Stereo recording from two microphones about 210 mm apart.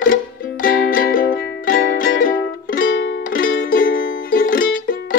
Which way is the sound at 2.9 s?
55° left (ahead or behind).